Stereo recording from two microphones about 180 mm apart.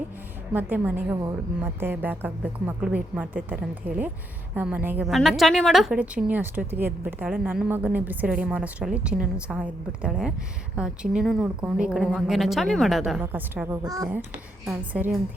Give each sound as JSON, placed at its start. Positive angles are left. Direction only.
{"t": 0.5, "sound": "a woman's voice", "side_deg": -10}
{"t": 13.8, "sound": "a child's voice", "side_deg": -20}
{"t": 14.7, "sound": "a woman's voice", "side_deg": -10}